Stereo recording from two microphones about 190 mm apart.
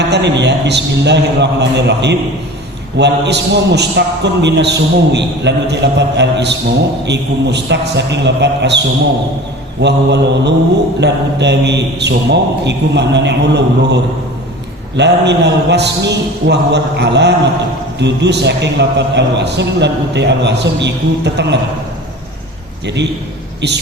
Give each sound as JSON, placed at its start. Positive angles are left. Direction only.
{"t": 0.1, "sound": "a man's voice", "side_deg": -65}
{"t": 9.8, "sound": "a man's voice", "side_deg": -65}